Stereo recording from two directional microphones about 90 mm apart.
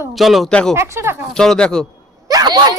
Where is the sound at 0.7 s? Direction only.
30° right (ahead or behind).